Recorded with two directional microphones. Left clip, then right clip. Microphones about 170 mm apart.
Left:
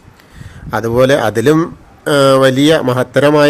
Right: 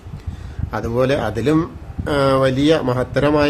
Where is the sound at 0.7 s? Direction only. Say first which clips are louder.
Left 8 dB; 30° left (ahead or behind).